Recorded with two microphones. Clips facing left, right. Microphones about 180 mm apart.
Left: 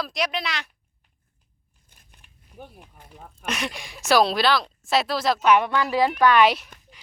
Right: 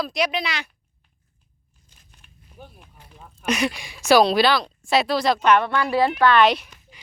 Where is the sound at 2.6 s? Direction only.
50° left (ahead or behind).